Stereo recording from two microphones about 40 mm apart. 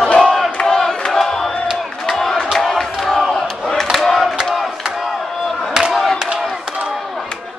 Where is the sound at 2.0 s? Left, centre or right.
Centre.